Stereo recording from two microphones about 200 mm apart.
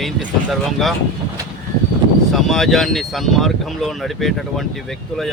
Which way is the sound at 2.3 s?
Centre (ahead or behind).